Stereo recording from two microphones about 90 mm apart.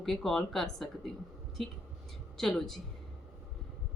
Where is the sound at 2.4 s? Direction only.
5° left (ahead or behind).